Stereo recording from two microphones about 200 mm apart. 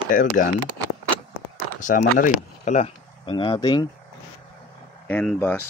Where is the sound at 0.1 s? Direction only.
40° left (ahead or behind).